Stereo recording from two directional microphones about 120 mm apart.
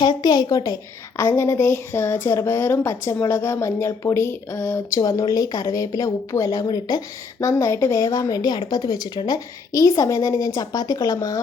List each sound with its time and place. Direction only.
0.0 s speech: 35° left (ahead or behind)